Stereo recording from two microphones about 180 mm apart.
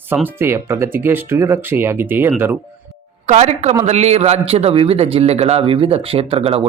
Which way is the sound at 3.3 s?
40° right (ahead or behind).